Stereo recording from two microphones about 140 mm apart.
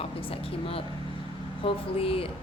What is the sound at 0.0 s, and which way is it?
Speech, 40° left (ahead or behind).